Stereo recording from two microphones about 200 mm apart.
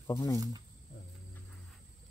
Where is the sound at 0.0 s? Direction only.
15° left (ahead or behind).